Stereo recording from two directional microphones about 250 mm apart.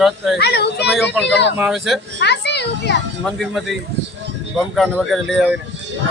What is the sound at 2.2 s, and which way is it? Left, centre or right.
Speech, left.